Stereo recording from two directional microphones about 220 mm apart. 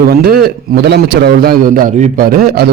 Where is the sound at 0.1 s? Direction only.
45° right (ahead or behind).